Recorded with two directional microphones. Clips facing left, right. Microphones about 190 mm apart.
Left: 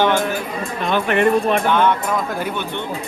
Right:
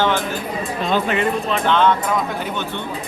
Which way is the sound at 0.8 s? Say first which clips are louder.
Left 3 dB; 55° left (ahead or behind).